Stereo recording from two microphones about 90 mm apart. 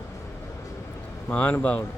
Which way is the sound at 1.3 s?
15° left (ahead or behind).